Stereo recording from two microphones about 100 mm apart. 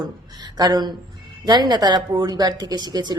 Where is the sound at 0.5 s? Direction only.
40° right (ahead or behind).